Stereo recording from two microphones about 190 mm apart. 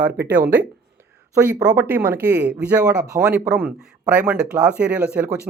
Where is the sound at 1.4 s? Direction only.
10° right (ahead or behind).